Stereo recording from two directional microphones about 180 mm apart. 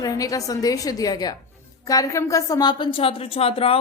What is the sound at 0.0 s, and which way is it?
A woman's voice, 20° left (ahead or behind).